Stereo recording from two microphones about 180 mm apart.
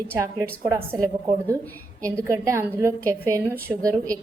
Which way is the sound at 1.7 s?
10° left (ahead or behind).